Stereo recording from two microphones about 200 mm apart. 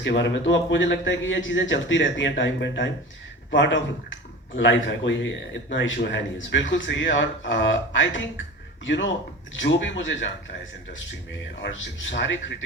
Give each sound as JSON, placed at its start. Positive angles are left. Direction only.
{"t": 0.0, "sound": "a man's voice", "side_deg": 60}
{"t": 11.6, "sound": "speech", "side_deg": 60}